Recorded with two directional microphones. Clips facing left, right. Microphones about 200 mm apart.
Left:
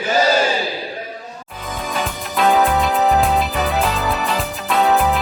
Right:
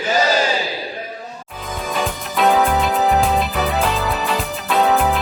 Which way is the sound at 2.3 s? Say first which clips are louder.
Even; centre (ahead or behind).